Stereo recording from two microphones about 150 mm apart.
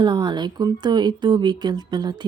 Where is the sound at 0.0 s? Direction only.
30° right (ahead or behind).